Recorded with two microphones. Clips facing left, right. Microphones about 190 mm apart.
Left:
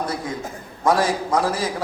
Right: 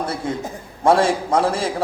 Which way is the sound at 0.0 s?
25° right (ahead or behind).